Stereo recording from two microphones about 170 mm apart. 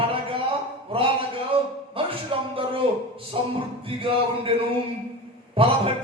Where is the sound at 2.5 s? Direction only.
35° right (ahead or behind).